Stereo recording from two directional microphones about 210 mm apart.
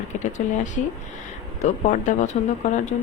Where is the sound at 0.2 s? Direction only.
35° left (ahead or behind).